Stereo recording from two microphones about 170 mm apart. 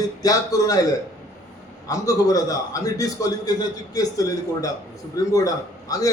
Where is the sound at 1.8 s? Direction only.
20° left (ahead or behind).